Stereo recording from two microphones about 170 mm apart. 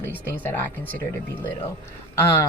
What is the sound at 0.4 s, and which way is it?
Speech, 10° left (ahead or behind).